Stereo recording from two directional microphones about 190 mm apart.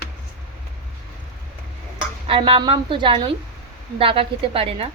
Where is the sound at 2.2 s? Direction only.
30° right (ahead or behind).